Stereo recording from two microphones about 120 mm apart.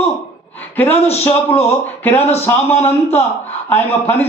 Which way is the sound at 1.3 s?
20° left (ahead or behind).